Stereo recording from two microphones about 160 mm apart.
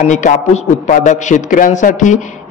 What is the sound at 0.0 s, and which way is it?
A man's voice, 50° left (ahead or behind).